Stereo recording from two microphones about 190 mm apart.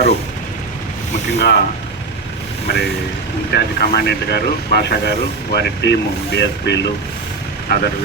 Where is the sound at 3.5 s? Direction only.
60° left (ahead or behind).